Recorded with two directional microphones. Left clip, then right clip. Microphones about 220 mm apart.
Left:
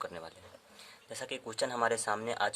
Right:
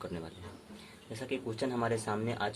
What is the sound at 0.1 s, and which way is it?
Speech, 35° left (ahead or behind).